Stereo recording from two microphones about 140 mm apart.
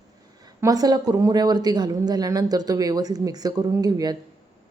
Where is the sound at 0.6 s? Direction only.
25° right (ahead or behind).